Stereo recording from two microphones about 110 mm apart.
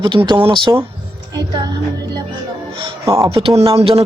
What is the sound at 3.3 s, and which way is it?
Speech, 55° right (ahead or behind).